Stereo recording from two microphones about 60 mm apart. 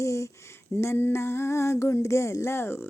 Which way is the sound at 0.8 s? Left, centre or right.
Left.